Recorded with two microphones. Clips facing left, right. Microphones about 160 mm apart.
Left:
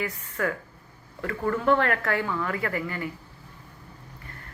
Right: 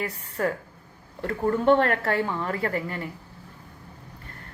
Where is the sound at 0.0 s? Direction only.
35° right (ahead or behind).